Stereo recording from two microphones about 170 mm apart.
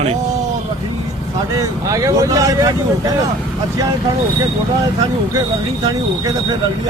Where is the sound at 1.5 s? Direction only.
20° right (ahead or behind).